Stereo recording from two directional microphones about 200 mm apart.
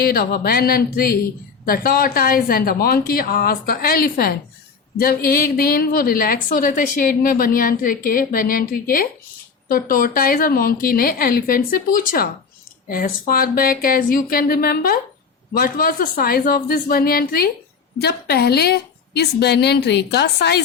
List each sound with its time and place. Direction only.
0.0 s a woman's voice: 50° left (ahead or behind)